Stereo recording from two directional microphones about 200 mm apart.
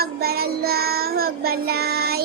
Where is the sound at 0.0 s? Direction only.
50° right (ahead or behind).